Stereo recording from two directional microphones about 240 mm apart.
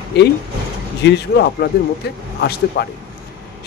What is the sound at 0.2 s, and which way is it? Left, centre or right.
Speech, left.